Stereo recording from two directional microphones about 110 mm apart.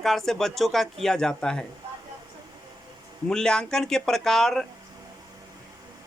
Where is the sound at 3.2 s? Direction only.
5° left (ahead or behind).